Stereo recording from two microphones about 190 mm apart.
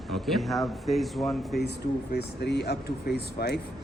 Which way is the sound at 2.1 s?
60° left (ahead or behind).